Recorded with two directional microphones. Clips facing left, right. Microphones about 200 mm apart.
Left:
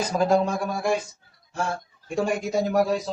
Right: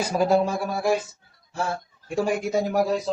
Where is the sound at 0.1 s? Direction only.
10° right (ahead or behind).